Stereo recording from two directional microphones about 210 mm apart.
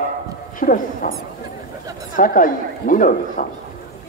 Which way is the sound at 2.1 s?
40° left (ahead or behind).